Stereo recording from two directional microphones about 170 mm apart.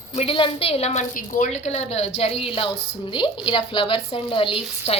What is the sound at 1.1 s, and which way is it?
A woman's voice, 50° left (ahead or behind).